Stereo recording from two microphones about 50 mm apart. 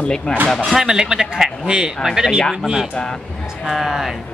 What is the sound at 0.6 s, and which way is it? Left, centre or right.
Speech, centre.